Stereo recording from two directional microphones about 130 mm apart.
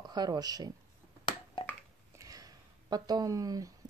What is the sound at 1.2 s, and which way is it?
Finger snapping, 40° left (ahead or behind).